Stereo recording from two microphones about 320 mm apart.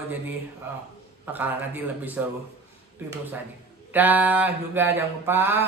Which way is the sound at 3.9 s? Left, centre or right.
Centre.